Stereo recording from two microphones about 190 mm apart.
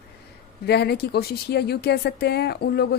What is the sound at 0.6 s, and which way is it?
Speech, 60° left (ahead or behind).